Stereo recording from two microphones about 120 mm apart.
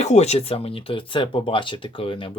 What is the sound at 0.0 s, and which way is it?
Speech, 70° left (ahead or behind).